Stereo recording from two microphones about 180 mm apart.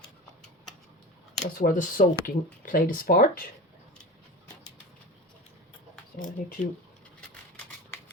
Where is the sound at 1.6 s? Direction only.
50° left (ahead or behind).